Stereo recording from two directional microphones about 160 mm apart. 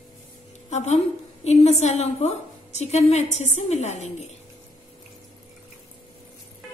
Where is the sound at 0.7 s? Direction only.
45° left (ahead or behind).